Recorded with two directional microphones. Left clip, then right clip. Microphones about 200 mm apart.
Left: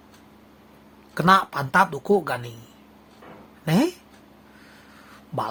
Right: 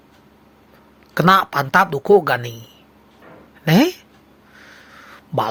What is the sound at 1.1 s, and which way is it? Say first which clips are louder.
Speech: right 4 dB; 30° right (ahead or behind).